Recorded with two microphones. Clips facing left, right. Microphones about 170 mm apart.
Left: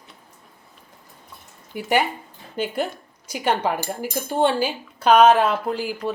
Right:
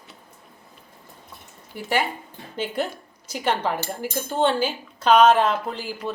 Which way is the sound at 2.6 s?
10° left (ahead or behind).